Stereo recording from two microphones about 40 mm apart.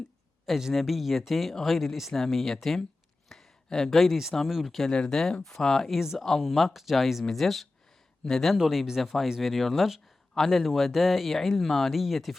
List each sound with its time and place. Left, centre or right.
0.7 s speech: centre
3.2 s a sound: centre
3.7 s speech: centre
4.9 s speech: left
5.1 s speech: centre
8.2 s speech: centre
8.5 s speech: centre
9.0 s speech: centre